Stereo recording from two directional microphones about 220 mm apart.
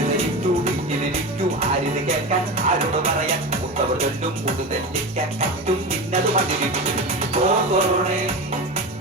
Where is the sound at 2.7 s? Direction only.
25° right (ahead or behind).